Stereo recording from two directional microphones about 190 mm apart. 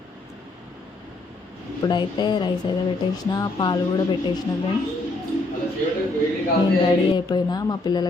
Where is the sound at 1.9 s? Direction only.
25° left (ahead or behind).